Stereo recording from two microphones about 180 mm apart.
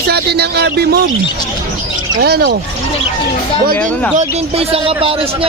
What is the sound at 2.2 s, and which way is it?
Speech, 65° right (ahead or behind).